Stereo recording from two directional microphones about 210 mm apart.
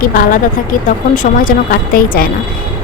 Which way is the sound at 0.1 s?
40° left (ahead or behind).